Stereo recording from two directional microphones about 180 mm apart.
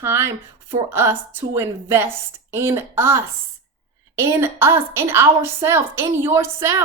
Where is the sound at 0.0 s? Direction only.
15° right (ahead or behind).